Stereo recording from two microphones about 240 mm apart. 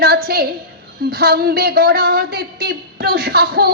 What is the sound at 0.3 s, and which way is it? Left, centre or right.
A man's voice, right.